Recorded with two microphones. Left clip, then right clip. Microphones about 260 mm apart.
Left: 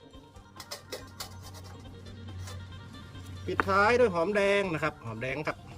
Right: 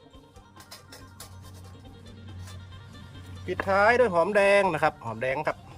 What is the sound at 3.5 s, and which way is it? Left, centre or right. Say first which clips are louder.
Speech: right 3 dB; centre.